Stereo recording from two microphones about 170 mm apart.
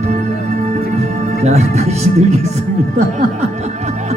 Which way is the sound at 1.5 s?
40° right (ahead or behind).